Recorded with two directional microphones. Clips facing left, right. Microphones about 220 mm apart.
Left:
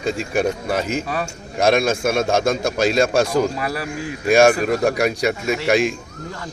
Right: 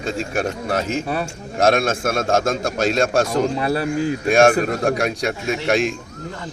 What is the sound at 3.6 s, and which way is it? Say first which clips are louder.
Speech: right 5 dB; 25° right (ahead or behind).